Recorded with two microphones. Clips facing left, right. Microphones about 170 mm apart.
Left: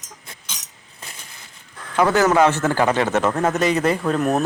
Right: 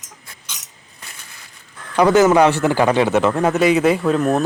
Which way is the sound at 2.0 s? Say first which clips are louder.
Right 4 dB; 15° right (ahead or behind).